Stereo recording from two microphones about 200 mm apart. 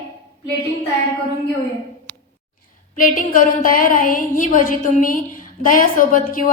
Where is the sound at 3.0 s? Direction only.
40° left (ahead or behind).